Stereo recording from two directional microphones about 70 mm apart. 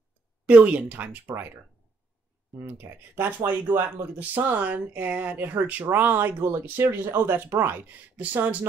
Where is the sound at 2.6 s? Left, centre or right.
Right.